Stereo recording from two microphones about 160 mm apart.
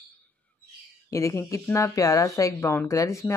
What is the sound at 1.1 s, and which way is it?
Speech, 20° left (ahead or behind).